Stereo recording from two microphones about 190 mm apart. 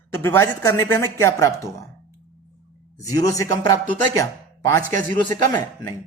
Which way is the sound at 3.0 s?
20° left (ahead or behind).